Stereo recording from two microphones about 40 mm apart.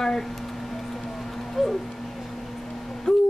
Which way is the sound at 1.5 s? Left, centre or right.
Centre.